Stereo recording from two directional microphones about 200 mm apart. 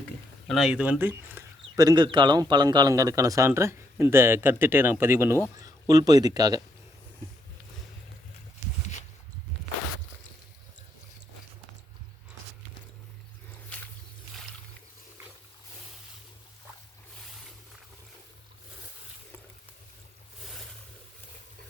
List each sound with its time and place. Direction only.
0.4 s speech: centre (ahead or behind); by 6.6 s 20° right (ahead or behind)